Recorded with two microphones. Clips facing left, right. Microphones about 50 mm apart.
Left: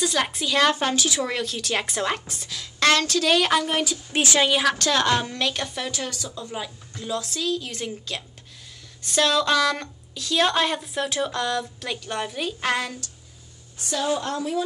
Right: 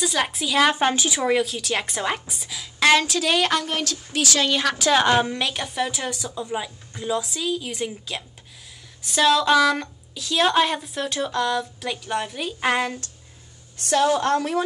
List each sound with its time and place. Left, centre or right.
0.0 s a woman's voice: centre
0.7 s a woman's voice: right
1.3 s a woman's voice: centre
4.1 s speech: left
4.5 s a woman's voice: centre
4.7 s a woman's voice: centre
12.5 s a woman's voice: centre
13.7 s a woman's voice: right